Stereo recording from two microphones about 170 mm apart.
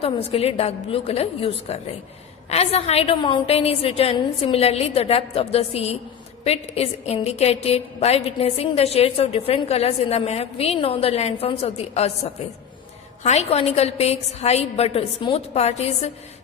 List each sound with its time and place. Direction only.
0.0 s a woman's voice: 35° left (ahead or behind)